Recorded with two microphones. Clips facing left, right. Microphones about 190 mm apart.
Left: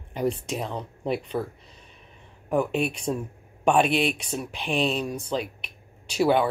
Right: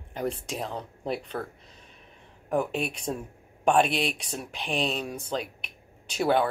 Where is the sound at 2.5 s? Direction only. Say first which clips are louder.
Left 3 dB; centre (ahead or behind).